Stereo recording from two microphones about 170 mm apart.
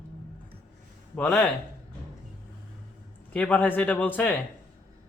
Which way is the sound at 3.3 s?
10° left (ahead or behind).